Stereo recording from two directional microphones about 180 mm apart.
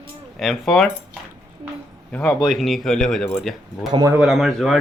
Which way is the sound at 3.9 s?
20° right (ahead or behind).